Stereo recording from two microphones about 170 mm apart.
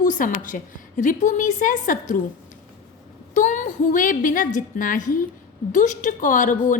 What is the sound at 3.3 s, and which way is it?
A woman's voice, 45° left (ahead or behind).